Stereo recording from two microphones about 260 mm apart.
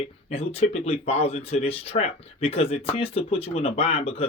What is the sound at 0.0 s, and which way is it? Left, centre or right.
Speech, left.